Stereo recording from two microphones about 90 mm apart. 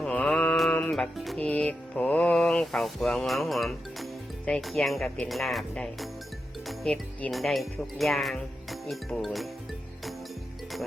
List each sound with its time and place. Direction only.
0.0 s mantra: 10° left (ahead or behind)
0.7 s music: 15° left (ahead or behind)
0.9 s music: centre (ahead or behind)
1.4 s music: 15° left (ahead or behind)
5.7 s speech: 10° left (ahead or behind)
6.7 s music: 5° left (ahead or behind)